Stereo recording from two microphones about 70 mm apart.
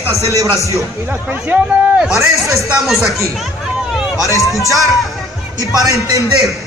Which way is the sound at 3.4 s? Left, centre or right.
Centre.